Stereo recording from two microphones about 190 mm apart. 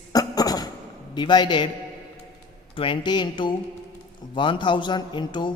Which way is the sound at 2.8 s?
25° left (ahead or behind).